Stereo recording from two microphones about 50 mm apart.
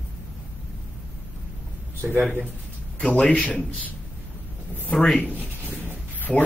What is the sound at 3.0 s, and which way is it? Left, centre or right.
Speech, left.